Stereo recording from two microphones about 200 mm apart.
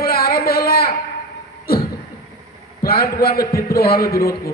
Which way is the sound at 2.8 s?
50° left (ahead or behind).